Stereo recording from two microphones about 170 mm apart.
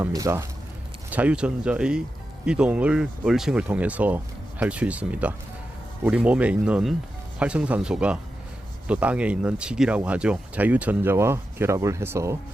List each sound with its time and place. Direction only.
0.1 s speech: 20° right (ahead or behind)
1.1 s speech: 5° right (ahead or behind)